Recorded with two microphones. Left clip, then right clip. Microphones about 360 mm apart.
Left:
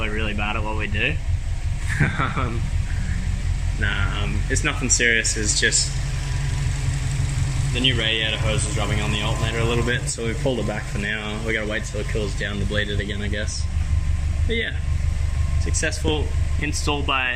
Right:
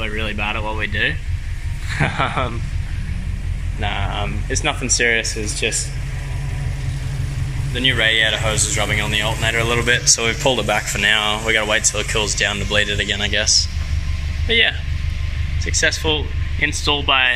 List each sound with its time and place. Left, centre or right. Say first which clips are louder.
0.0 s speech: right 3 dB; centre
3.8 s speech: right 2 dB; centre
7.7 s speech: right 5 dB; centre
10.4 s speech: right 8 dB; right
11.5 s speech: right 6 dB; centre